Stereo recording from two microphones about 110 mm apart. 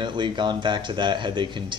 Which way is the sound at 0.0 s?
45° right (ahead or behind).